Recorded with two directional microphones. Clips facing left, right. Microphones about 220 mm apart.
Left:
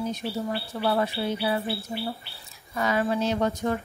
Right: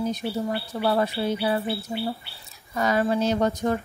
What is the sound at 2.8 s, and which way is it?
A woman's voice, 40° right (ahead or behind).